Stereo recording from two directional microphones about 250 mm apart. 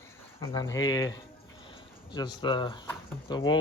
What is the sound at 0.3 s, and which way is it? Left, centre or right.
Speech, centre.